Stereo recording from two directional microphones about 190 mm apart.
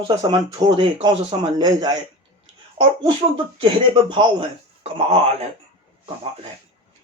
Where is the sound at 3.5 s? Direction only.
25° right (ahead or behind).